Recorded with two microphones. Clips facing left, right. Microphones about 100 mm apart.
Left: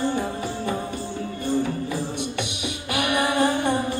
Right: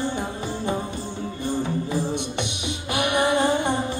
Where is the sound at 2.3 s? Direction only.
20° right (ahead or behind).